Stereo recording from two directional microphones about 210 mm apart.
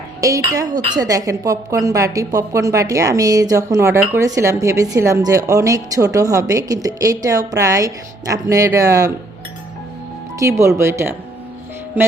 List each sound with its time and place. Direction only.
0.2 s speech: 15° right (ahead or behind)
10.3 s speech: 15° right (ahead or behind)